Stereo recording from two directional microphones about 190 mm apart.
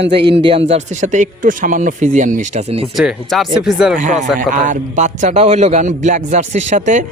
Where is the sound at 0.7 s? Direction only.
40° right (ahead or behind).